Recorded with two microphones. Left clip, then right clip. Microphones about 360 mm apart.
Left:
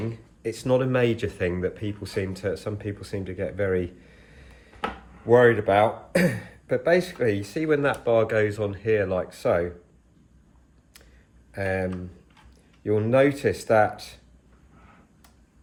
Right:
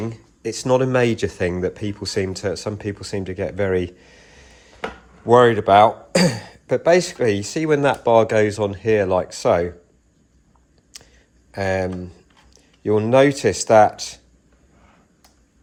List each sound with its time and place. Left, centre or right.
0.1 s speech: right
10.9 s a sound: centre
11.5 s speech: centre